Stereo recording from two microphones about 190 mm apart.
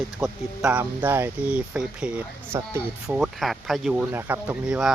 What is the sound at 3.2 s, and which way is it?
Speech, centre (ahead or behind).